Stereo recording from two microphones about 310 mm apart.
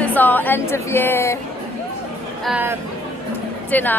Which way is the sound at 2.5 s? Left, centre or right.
Centre.